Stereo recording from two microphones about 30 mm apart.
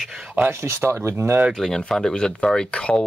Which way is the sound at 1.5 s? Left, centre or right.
Centre.